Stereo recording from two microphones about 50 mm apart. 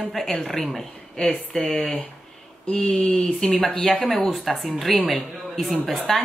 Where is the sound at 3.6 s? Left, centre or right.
Centre.